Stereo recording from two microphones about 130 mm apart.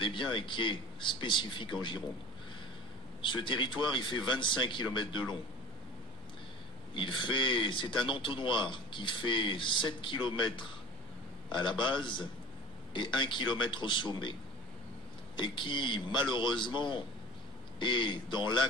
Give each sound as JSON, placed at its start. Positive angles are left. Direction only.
{"t": 0.0, "sound": "a man's voice", "side_deg": 40}
{"t": 3.2, "sound": "a man's voice", "side_deg": 40}
{"t": 6.9, "sound": "a man's voice", "side_deg": 40}
{"t": 15.3, "sound": "a man's voice", "side_deg": 40}